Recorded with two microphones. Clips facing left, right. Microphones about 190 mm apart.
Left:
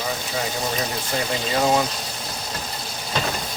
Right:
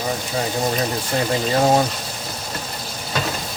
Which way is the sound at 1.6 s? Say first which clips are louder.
Right 3 dB; 35° right (ahead or behind).